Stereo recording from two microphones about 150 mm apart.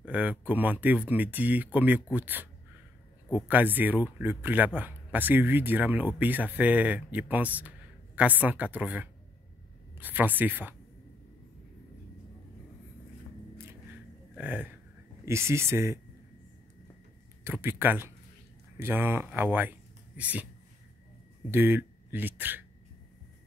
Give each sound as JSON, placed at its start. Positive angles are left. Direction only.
{"t": 0.0, "sound": "a man's voice", "side_deg": -10}
{"t": 14.3, "sound": "a sound", "side_deg": -10}
{"t": 15.2, "sound": "a man's voice", "side_deg": -20}
{"t": 17.4, "sound": "a man's voice", "side_deg": -15}
{"t": 21.5, "sound": "speech", "side_deg": -15}